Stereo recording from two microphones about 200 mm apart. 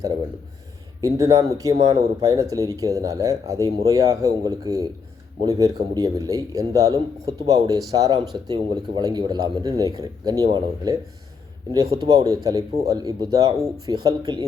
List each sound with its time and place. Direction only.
1.0 s a man's voice: 15° right (ahead or behind)
11.9 s a man's voice: 20° right (ahead or behind)